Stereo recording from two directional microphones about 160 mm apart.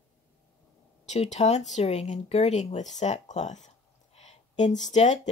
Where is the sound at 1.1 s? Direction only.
45° left (ahead or behind).